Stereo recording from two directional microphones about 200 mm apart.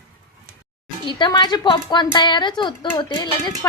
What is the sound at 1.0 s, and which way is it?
A woman's voice, 25° left (ahead or behind).